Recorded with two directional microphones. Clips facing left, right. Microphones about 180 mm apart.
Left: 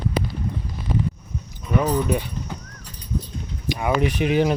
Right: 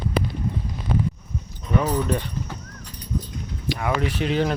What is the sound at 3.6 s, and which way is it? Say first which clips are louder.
Speech: left 3 dB; 15° left (ahead or behind).